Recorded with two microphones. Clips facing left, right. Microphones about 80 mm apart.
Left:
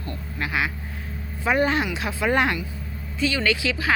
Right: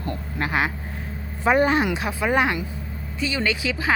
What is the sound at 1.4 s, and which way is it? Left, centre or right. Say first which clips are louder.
A woman's voice: right 3 dB; right.